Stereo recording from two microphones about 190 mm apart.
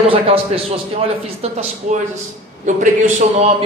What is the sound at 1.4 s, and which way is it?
Speech, 30° right (ahead or behind).